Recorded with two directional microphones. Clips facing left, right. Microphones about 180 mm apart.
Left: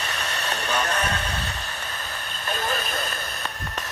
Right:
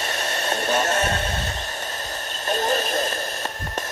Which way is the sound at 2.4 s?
40° right (ahead or behind).